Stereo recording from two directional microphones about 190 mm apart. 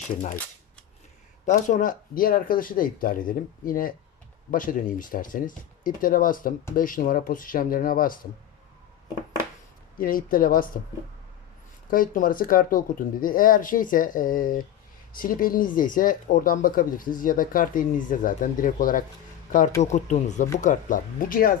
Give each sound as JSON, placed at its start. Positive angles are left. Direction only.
{"t": 1.5, "sound": "speech", "side_deg": 40}
{"t": 10.0, "sound": "speech", "side_deg": 50}
{"t": 11.9, "sound": "speech", "side_deg": 45}